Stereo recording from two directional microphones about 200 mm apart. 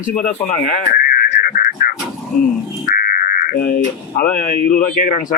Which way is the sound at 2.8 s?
50° left (ahead or behind).